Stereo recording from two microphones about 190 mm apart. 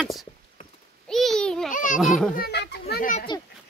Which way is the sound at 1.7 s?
45° left (ahead or behind).